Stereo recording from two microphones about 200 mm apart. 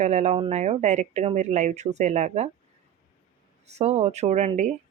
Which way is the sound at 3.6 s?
35° right (ahead or behind).